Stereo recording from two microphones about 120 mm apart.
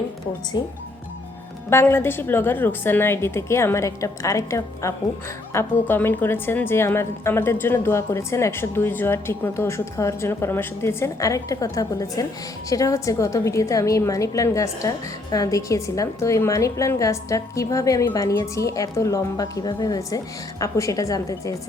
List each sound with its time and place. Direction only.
0.5 s speech: 35° left (ahead or behind)
1.7 s a woman's voice: 20° left (ahead or behind)